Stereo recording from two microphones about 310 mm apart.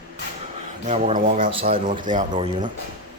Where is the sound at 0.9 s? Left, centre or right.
Right.